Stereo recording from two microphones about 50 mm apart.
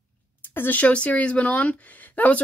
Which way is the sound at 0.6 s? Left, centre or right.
Left.